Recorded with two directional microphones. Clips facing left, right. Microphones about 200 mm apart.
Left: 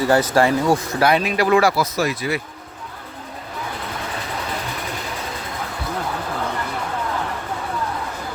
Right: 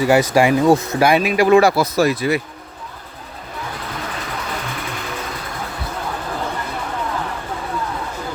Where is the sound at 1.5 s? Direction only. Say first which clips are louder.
Right 4 dB; 25° right (ahead or behind).